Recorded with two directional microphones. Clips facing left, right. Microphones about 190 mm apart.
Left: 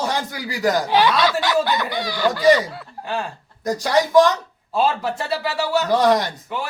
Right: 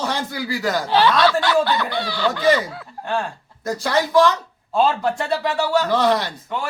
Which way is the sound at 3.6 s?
15° left (ahead or behind).